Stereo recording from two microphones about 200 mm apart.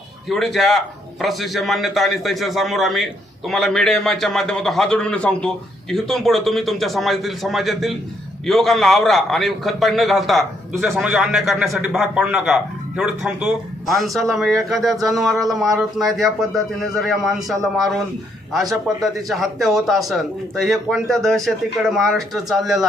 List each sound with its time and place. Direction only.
0.3 s a man's voice: centre (ahead or behind)